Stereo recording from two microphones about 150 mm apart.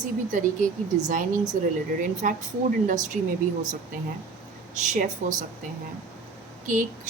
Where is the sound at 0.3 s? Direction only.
60° right (ahead or behind).